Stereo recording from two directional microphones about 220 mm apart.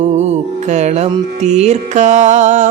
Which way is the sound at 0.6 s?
30° right (ahead or behind).